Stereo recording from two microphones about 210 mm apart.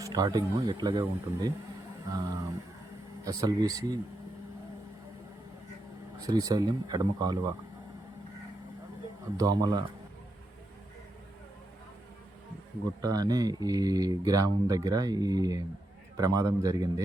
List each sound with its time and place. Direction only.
0.0 s speech: 20° right (ahead or behind)
6.1 s speech: 15° right (ahead or behind)
9.4 s speech: 20° right (ahead or behind)
13.0 s speech: 15° right (ahead or behind)